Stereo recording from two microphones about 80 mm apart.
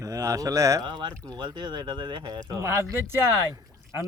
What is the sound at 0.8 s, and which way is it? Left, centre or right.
Speech, right.